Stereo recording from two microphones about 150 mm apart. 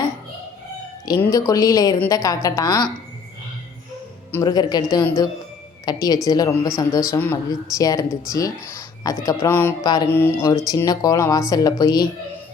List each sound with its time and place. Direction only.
1.2 s speech: 20° left (ahead or behind)
4.3 s speech: 25° left (ahead or behind)
9.8 s speech: 25° left (ahead or behind)
10.1 s speech: 15° left (ahead or behind)